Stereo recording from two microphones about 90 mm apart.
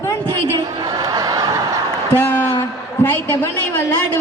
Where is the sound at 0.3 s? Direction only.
40° right (ahead or behind).